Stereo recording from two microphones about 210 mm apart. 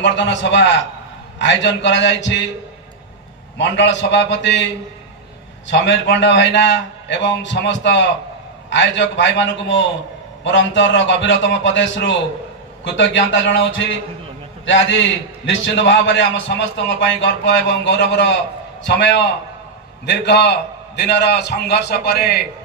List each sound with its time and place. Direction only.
0.0 s a man's voice: 60° left (ahead or behind)
3.5 s a man's voice: 60° left (ahead or behind)
5.7 s a man's voice: 60° left (ahead or behind)